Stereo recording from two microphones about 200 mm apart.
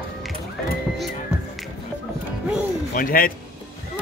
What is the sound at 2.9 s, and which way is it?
Speech, 45° left (ahead or behind).